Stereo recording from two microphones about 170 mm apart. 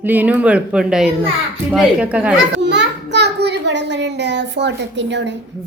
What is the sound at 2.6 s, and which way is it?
A child's voice, 90° right.